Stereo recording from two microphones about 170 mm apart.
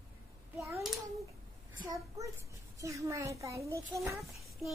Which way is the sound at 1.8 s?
25° right (ahead or behind).